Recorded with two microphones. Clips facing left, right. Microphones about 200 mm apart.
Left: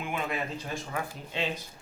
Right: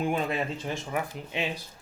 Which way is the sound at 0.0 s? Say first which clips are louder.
Right 5 dB; 35° right (ahead or behind).